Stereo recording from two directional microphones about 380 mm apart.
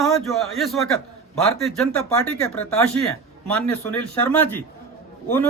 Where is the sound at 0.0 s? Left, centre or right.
Centre.